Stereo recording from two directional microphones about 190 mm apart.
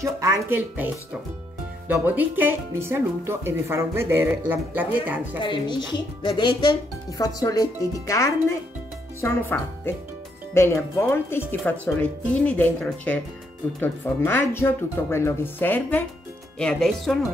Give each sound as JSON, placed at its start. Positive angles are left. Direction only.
{"t": 0.0, "sound": "speech", "side_deg": -15}
{"t": 1.9, "sound": "speech", "side_deg": -10}
{"t": 5.4, "sound": "speech", "side_deg": 25}